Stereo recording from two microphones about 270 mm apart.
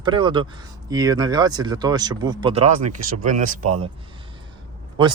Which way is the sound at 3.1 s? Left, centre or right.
Right.